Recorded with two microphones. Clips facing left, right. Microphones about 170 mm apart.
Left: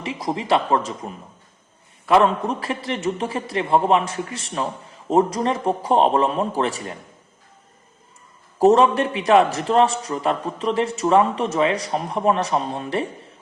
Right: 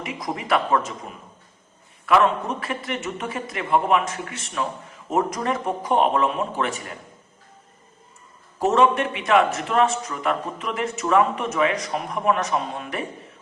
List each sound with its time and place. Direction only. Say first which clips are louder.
0.0 s speech: left 4 dB; 30° left (ahead or behind)
2.0 s a man's voice: left 2 dB; 30° left (ahead or behind)
8.5 s a man's voice: left 4 dB; 35° left (ahead or behind)